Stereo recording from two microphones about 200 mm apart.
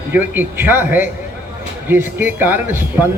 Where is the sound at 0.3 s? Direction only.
10° right (ahead or behind).